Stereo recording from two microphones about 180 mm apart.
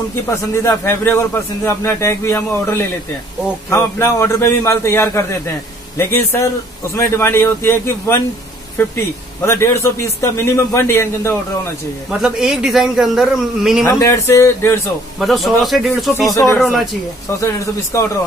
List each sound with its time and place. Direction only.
0.3 s a man's voice: 15° left (ahead or behind)
12.1 s a man's voice: 5° right (ahead or behind)
13.8 s a man's voice: 20° left (ahead or behind)
15.1 s a man's voice: centre (ahead or behind)
16.1 s a man's voice: 15° left (ahead or behind)
16.4 s a man's voice: centre (ahead or behind)
17.3 s a man's voice: 15° left (ahead or behind)